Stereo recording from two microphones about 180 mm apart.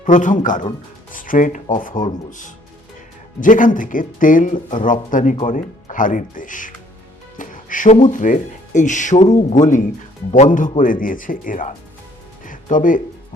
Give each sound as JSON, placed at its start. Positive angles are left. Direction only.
{"t": 0.0, "sound": "speech", "side_deg": 45}
{"t": 1.1, "sound": "music", "side_deg": 50}
{"t": 1.6, "sound": "speech", "side_deg": 45}
{"t": 3.4, "sound": "speech", "side_deg": 45}
{"t": 7.3, "sound": "music", "side_deg": 45}
{"t": 8.1, "sound": "speech", "side_deg": 45}
{"t": 12.5, "sound": "music", "side_deg": 45}